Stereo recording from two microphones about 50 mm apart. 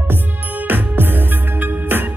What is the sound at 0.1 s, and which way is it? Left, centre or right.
Music, right.